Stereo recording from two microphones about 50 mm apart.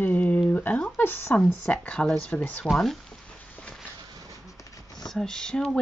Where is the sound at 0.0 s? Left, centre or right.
Left.